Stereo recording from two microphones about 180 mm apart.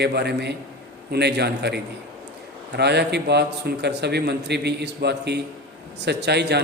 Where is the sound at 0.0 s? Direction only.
65° right (ahead or behind).